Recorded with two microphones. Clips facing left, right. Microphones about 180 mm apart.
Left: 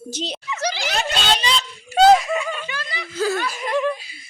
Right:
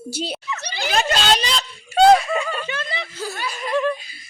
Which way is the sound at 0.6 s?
90° left.